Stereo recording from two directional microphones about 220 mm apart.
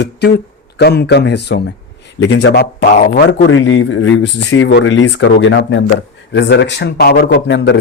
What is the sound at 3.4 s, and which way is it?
Speech, 60° left (ahead or behind).